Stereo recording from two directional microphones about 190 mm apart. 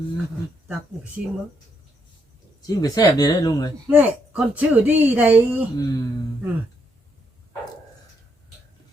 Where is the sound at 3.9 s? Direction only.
10° right (ahead or behind).